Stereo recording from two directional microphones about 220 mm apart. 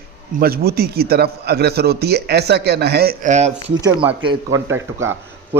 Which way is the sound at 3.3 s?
30° right (ahead or behind).